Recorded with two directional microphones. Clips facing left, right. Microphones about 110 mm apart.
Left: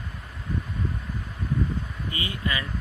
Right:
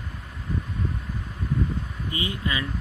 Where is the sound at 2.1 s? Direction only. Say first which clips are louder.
Right 2 dB; 20° right (ahead or behind).